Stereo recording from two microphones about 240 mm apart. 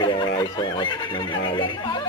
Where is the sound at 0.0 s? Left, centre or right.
Centre.